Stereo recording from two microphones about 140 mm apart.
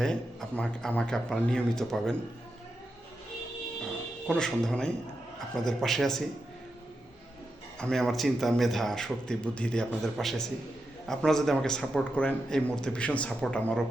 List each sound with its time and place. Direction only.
0.0 s a man's voice: 5° left (ahead or behind)
4.3 s a man's voice: 5° left (ahead or behind)
7.8 s a man's voice: 5° left (ahead or behind)